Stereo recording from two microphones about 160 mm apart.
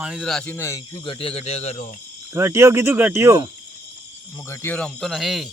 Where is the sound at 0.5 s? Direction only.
15° left (ahead or behind).